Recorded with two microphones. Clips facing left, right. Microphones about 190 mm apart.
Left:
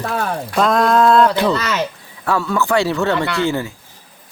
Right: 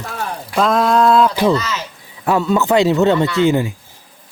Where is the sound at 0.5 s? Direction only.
Centre (ahead or behind).